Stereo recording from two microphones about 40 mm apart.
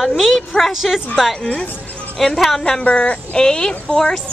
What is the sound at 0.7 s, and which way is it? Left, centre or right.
A woman's voice, centre.